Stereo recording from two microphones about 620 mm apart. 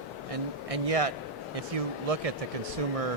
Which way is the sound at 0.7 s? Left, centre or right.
Right.